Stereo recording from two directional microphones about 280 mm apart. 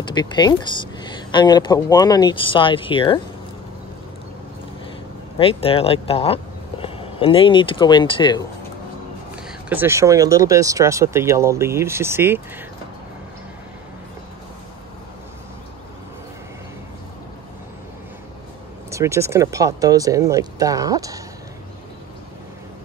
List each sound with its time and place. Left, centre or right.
0.0 s speech: centre
5.4 s speech: centre
9.3 s speech: centre
18.9 s speech: centre